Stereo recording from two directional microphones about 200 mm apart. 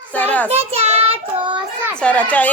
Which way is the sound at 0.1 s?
10° left (ahead or behind).